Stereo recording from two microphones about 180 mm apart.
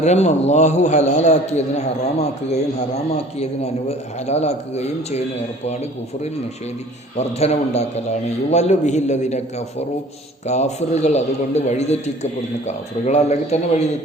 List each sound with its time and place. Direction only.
0.0 s a man's voice: 40° left (ahead or behind)